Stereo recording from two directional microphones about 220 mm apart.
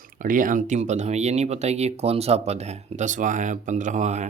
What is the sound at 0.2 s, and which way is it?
Speech, 40° right (ahead or behind).